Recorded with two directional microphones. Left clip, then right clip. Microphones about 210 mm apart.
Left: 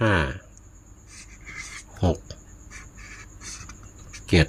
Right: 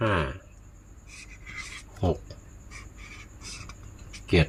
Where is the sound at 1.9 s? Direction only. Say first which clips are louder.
Left 3 dB; 40° left (ahead or behind).